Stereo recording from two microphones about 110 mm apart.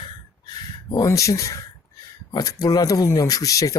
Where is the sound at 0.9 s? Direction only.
30° left (ahead or behind).